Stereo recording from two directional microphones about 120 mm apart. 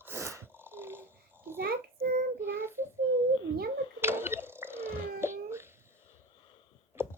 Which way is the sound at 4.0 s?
20° right (ahead or behind).